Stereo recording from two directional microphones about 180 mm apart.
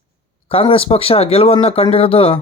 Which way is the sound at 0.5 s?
30° left (ahead or behind).